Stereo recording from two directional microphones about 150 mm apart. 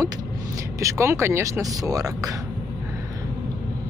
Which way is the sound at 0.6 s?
20° right (ahead or behind).